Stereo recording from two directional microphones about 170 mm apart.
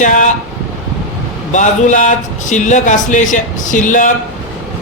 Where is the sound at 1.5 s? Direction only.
45° left (ahead or behind).